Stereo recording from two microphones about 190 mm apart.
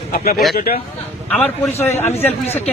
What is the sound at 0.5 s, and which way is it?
Speech, 50° left (ahead or behind).